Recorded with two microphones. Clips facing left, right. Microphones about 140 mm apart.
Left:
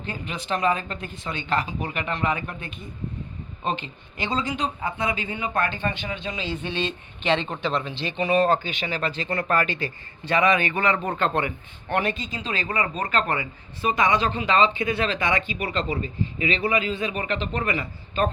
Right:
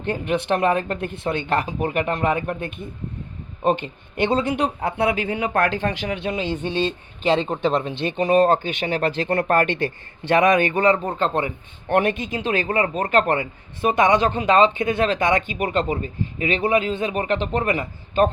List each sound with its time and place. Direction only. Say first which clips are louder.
0.0 s a man's voice: right 10 dB; 60° right (ahead or behind); by 7.3 s 40° right (ahead or behind)
7.3 s speech: right 5 dB; 15° right (ahead or behind)
7.6 s speech: right 5 dB; 50° right (ahead or behind)
11.9 s speech: right 6 dB; 55° right (ahead or behind)